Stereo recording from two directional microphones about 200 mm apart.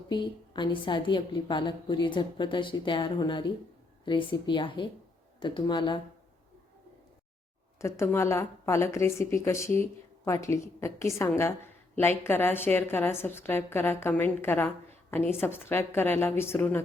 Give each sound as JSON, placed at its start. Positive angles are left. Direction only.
{"t": 0.1, "sound": "a woman's voice", "side_deg": 25}
{"t": 7.8, "sound": "a woman's voice", "side_deg": 15}